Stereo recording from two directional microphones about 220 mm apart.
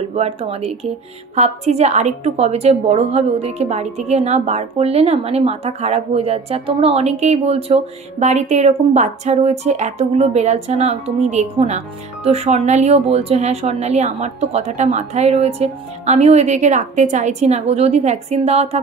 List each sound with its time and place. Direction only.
0.1 s a woman's voice: 30° right (ahead or behind)